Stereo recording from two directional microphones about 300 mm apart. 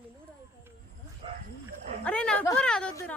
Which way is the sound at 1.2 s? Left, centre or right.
Centre.